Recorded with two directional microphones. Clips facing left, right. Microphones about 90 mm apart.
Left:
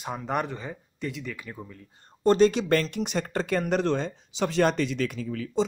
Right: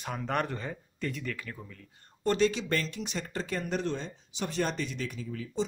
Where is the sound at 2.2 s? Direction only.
35° left (ahead or behind).